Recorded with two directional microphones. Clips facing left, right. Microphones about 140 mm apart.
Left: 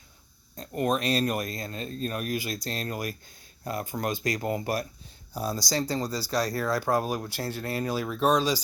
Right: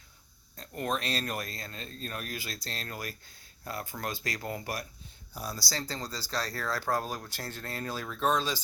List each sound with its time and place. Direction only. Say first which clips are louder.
0.5 s speech: left 6 dB; 20° left (ahead or behind)